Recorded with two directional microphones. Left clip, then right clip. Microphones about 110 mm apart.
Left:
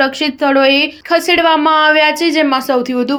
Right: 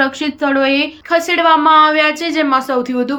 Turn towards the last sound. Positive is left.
turn(degrees=35)  # may be behind; listen again after turning